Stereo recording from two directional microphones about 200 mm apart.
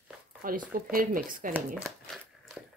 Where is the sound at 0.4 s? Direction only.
45° right (ahead or behind).